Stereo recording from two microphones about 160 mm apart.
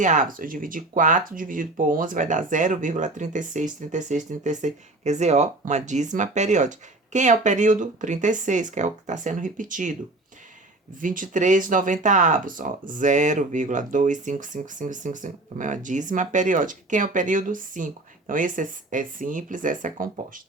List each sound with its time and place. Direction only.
0.0 s speech: 55° right (ahead or behind)
11.0 s speech: 55° right (ahead or behind)